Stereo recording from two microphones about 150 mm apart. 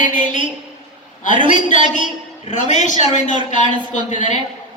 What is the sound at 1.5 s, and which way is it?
A woman's voice, 55° left (ahead or behind).